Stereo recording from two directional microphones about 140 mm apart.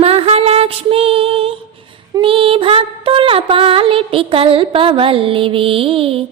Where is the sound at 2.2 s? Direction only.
40° right (ahead or behind).